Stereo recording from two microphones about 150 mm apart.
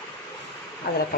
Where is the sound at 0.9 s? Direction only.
90° left.